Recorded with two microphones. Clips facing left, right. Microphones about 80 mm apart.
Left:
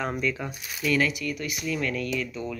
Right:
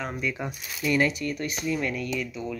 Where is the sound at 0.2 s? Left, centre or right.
Centre; by 1.7 s right.